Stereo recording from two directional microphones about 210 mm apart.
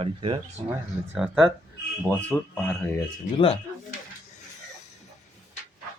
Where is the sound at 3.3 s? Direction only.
25° left (ahead or behind).